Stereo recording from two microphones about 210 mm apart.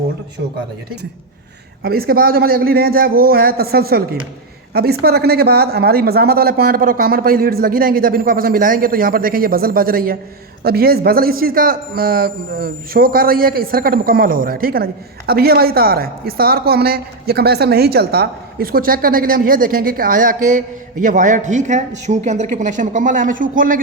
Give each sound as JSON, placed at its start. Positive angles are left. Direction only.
{"t": 1.8, "sound": "a woman's voice", "side_deg": -45}